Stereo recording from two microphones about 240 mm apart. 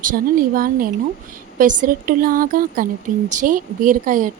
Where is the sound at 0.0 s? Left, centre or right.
Right.